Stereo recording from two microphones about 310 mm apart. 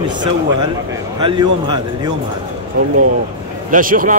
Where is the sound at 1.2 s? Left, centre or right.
Centre.